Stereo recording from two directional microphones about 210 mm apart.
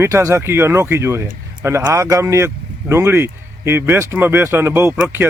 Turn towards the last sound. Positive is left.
turn(degrees=-10)  # may be behind; listen again after turning